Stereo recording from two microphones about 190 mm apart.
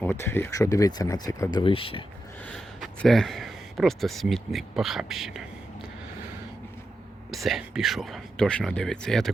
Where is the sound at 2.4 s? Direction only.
5° left (ahead or behind).